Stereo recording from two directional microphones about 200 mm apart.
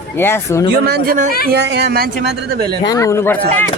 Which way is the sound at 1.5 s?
55° right (ahead or behind).